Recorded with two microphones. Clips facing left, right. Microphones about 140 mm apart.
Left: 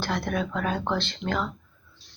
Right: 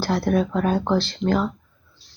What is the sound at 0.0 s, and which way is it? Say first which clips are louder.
Speech: right 7 dB; 35° right (ahead or behind).